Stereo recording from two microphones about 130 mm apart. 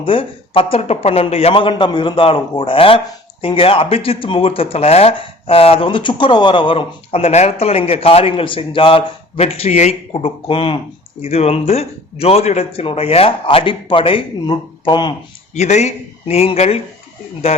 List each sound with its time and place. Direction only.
0.0 s speech: 45° left (ahead or behind); by 9.9 s 60° left (ahead or behind)
10.1 s speech: 45° left (ahead or behind)
11.2 s speech: 55° left (ahead or behind); by 15.1 s 35° left (ahead or behind)
15.5 s speech: 60° left (ahead or behind)